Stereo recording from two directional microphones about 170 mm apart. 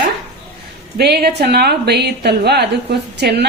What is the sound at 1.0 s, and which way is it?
A woman's voice, 70° right (ahead or behind).